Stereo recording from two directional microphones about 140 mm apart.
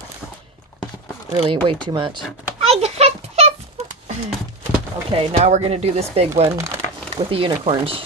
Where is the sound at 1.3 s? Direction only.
45° right (ahead or behind).